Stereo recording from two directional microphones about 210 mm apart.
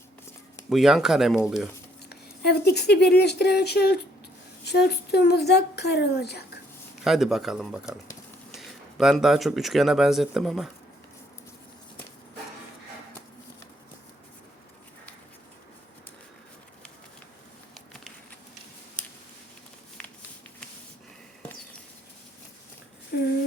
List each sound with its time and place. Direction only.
0.7 s speech: centre (ahead or behind)
2.0 s a woman's voice: 50° left (ahead or behind)
7.0 s speech: centre (ahead or behind)